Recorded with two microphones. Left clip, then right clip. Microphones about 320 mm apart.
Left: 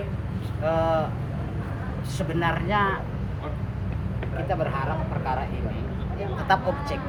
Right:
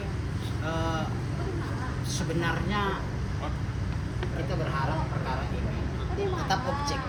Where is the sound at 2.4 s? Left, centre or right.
Centre.